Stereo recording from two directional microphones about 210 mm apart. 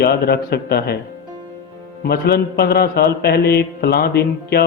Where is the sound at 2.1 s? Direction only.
50° left (ahead or behind).